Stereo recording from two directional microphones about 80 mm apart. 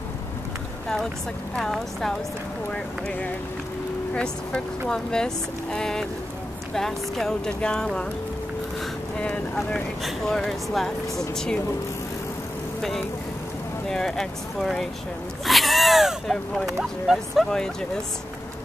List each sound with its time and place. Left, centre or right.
1.6 s speech: centre
2.7 s speech: centre
9.6 s speech: centre
13.8 s speech: centre
17.5 s speech: centre